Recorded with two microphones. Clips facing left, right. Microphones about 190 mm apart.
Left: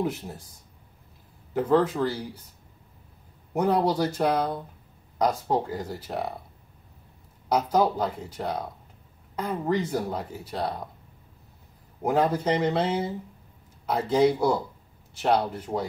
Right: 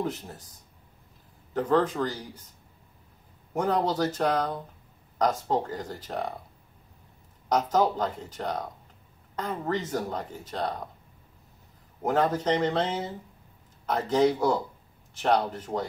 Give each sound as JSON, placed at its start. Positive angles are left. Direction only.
{"t": 0.0, "sound": "speech", "side_deg": 10}
{"t": 1.5, "sound": "speech", "side_deg": 10}
{"t": 3.5, "sound": "speech", "side_deg": 10}
{"t": 7.4, "sound": "speech", "side_deg": 10}
{"t": 12.0, "sound": "speech", "side_deg": 15}